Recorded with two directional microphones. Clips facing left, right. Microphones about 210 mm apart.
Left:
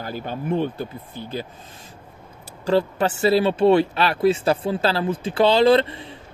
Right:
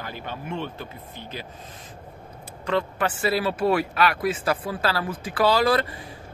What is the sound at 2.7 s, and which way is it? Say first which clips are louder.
Speech: left 5 dB; 30° left (ahead or behind).